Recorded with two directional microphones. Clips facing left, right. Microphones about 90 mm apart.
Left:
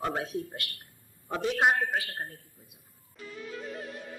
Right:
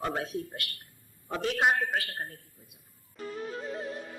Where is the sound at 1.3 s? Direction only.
15° left (ahead or behind).